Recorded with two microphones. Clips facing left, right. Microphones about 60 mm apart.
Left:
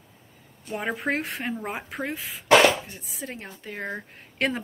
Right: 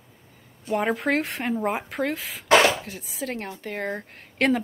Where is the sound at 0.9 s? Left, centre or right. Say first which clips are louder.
Right 3 dB; right.